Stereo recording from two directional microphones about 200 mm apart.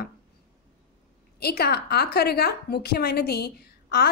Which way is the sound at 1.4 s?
55° left (ahead or behind).